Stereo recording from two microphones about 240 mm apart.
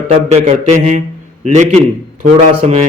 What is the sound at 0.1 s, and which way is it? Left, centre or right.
A man's voice, right.